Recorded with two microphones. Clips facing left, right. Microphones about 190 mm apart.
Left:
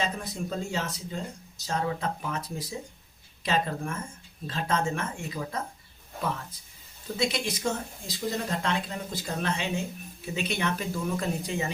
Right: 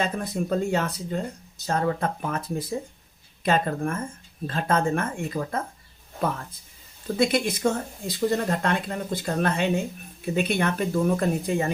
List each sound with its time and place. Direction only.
0.0 s speech: 55° right (ahead or behind)
7.2 s speech: 55° right (ahead or behind)